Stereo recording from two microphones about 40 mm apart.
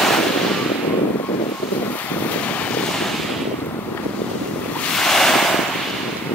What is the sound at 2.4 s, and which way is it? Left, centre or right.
Boat, left.